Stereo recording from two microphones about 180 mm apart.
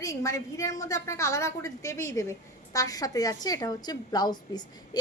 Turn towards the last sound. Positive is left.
turn(degrees=25)  # may be behind; listen again after turning